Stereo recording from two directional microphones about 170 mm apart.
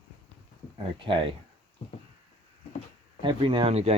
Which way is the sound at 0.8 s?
30° right (ahead or behind).